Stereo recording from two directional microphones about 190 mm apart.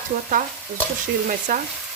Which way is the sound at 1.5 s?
45° right (ahead or behind).